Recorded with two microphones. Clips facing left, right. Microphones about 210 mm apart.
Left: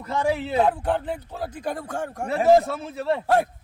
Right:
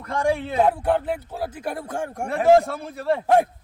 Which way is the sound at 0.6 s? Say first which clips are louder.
Right 4 dB; 10° right (ahead or behind).